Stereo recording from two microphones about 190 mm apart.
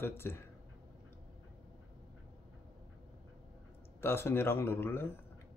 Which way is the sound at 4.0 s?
10° left (ahead or behind).